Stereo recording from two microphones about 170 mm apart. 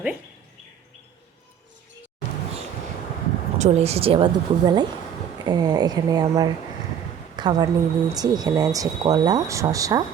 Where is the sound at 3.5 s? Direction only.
40° right (ahead or behind).